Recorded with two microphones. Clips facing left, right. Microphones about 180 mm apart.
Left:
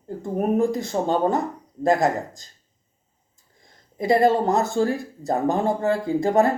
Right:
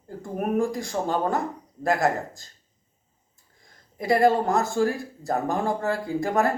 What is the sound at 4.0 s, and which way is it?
Speech, 20° left (ahead or behind).